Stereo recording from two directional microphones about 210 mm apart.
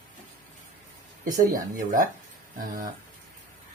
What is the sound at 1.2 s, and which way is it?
Speech, 40° right (ahead or behind).